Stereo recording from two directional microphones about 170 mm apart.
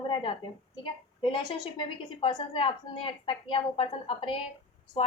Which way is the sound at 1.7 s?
30° left (ahead or behind).